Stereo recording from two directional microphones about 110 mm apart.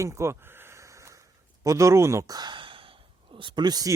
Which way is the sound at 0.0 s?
25° right (ahead or behind).